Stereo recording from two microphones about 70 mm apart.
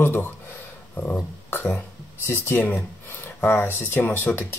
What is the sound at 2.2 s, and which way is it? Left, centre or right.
Speech, left.